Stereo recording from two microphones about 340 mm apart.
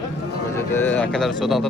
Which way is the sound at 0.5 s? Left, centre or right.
Centre.